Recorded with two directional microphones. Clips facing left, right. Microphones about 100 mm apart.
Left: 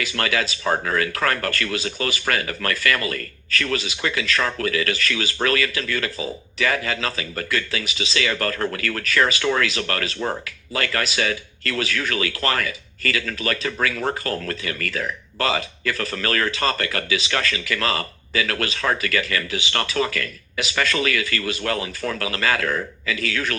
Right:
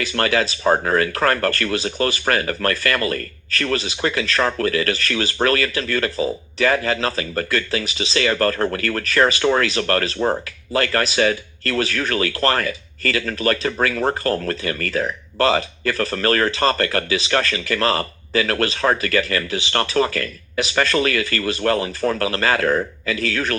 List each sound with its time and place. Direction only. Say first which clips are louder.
0.0 s speech: right 4 dB; 40° right (ahead or behind)